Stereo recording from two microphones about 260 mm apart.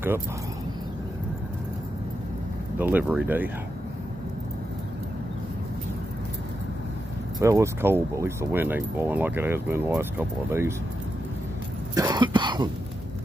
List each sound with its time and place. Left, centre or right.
2.8 s speech: centre
7.3 s speech: centre
11.9 s cough: centre